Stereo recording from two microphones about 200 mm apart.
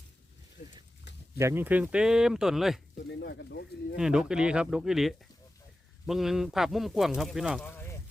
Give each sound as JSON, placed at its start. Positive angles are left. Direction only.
{"t": 1.4, "sound": "speech", "side_deg": -10}
{"t": 3.1, "sound": "speech", "side_deg": 55}
{"t": 3.9, "sound": "speech", "side_deg": -5}
{"t": 7.6, "sound": "a sound", "side_deg": 10}